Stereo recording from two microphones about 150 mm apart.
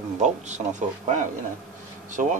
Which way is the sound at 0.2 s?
50° right (ahead or behind).